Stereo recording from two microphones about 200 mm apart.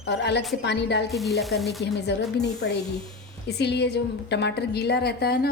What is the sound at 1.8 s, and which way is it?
A woman's voice, 55° left (ahead or behind).